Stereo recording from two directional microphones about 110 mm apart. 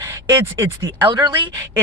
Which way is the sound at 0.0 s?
30° right (ahead or behind).